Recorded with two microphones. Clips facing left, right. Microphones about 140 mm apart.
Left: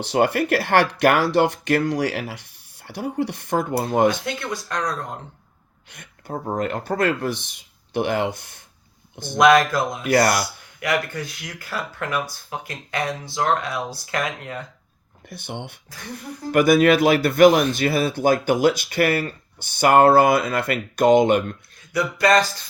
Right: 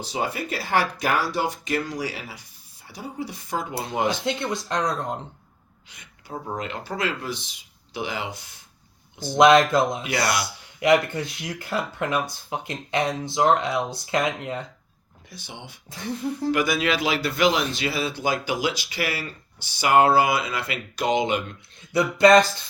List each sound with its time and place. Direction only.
0.1 s speech: 70° left (ahead or behind)
1.3 s speech: 60° left (ahead or behind)
4.2 s speech: 20° right (ahead or behind)
5.9 s speech: 55° left (ahead or behind)
9.3 s speech: 25° right (ahead or behind)
10.0 s speech: 50° left (ahead or behind)
10.8 s speech: 20° right (ahead or behind)
15.3 s speech: 55° left (ahead or behind)
22.2 s speech: 20° right (ahead or behind)